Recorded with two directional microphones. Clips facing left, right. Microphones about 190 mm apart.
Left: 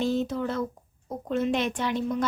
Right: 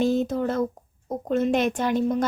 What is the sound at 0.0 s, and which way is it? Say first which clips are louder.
Speech: right 4 dB; 45° right (ahead or behind).